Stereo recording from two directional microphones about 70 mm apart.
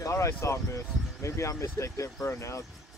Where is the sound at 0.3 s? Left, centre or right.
Left.